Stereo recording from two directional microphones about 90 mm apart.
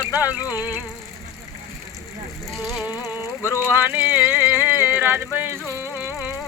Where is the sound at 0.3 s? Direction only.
45° left (ahead or behind).